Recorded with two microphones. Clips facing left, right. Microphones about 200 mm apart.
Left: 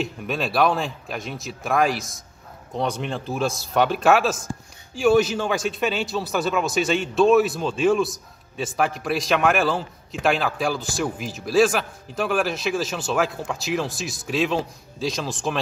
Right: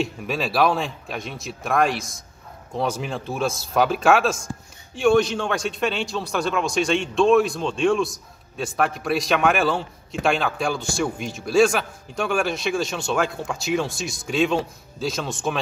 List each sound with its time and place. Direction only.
0.0 s a man's voice: centre (ahead or behind)